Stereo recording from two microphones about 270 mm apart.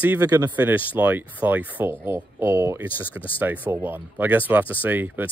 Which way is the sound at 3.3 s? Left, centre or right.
Centre.